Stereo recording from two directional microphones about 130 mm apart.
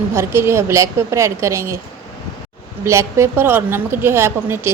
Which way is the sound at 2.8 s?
20° right (ahead or behind).